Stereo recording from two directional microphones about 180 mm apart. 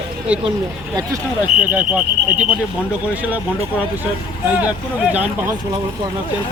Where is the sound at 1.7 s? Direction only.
10° right (ahead or behind).